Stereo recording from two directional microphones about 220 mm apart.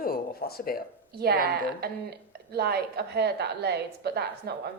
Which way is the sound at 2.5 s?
45° right (ahead or behind).